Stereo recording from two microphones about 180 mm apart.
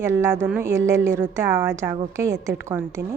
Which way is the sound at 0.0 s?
15° right (ahead or behind).